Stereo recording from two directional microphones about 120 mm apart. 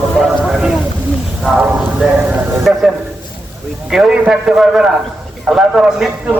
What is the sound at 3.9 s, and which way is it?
A man's voice, 5° right (ahead or behind).